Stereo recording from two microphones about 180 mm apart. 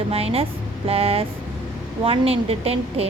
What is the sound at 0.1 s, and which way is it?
A woman's voice, 35° right (ahead or behind).